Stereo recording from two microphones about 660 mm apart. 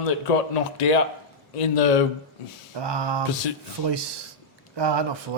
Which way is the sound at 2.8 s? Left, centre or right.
Right.